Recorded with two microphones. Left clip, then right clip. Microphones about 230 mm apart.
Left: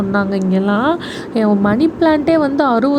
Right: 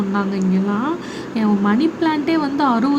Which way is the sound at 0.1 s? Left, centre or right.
Centre.